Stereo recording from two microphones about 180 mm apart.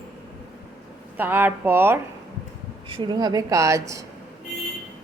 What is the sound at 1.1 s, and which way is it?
Speech, 10° right (ahead or behind).